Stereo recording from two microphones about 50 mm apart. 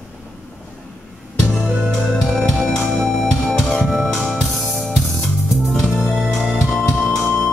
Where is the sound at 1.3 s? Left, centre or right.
Centre.